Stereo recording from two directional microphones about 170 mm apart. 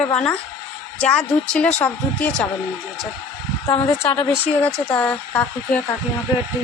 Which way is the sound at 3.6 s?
30° left (ahead or behind).